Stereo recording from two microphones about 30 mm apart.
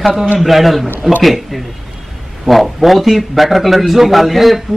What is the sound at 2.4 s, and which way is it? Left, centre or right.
A man's voice, centre.